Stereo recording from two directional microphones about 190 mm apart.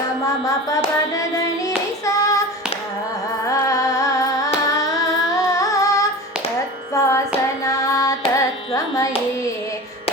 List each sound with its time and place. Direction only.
0.4 s music: 15° left (ahead or behind)
1.6 s child singing: 15° left (ahead or behind)
3.4 s music: 15° left (ahead or behind)
7.6 s carnatic music: 15° left (ahead or behind)